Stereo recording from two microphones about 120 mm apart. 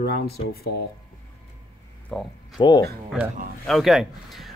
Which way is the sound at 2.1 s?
5° left (ahead or behind).